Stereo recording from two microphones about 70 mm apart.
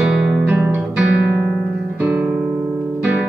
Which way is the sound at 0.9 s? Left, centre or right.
Centre.